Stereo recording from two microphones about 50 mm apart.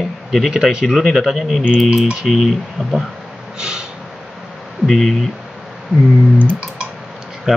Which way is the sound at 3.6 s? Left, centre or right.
Centre.